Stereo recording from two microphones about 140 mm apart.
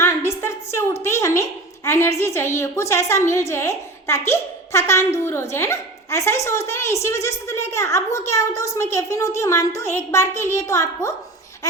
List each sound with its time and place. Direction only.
0.0 s a woman's voice: 20° left (ahead or behind)